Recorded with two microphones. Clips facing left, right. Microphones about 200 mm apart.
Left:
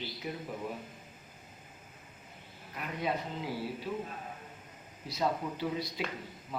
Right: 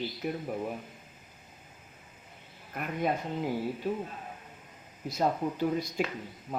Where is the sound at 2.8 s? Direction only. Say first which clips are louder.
Right 5 dB; 55° right (ahead or behind).